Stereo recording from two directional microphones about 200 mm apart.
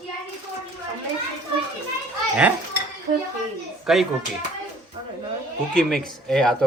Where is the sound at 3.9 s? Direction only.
Centre (ahead or behind).